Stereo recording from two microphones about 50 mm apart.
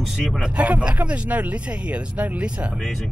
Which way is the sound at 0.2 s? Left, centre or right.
Centre.